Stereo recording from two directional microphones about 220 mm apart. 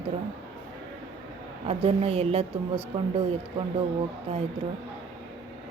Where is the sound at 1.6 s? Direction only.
25° right (ahead or behind).